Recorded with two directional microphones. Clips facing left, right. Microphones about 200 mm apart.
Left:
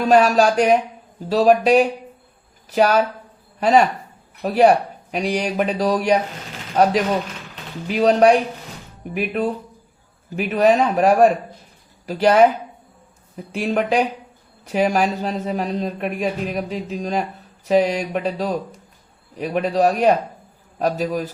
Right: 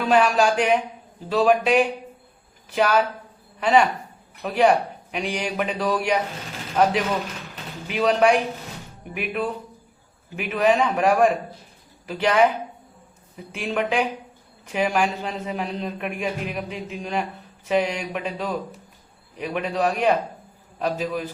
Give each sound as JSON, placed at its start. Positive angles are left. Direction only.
{"t": 0.0, "sound": "a woman's voice", "side_deg": 40}
{"t": 7.9, "sound": "speech", "side_deg": 40}